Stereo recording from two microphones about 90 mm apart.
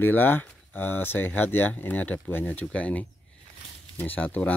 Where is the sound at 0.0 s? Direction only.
20° left (ahead or behind).